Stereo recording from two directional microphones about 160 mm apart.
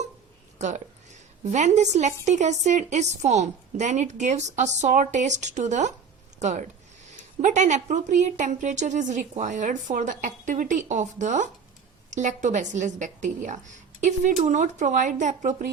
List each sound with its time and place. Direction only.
0.6 s a woman's voice: 45° right (ahead or behind)